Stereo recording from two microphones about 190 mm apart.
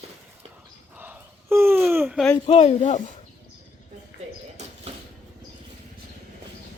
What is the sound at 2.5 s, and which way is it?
Speech, 30° left (ahead or behind).